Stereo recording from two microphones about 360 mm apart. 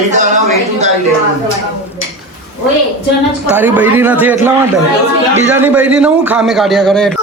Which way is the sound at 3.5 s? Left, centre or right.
Centre.